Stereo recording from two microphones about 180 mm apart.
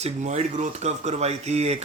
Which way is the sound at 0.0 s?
40° right (ahead or behind).